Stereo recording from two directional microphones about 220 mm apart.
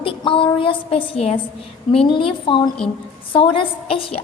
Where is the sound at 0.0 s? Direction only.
25° left (ahead or behind).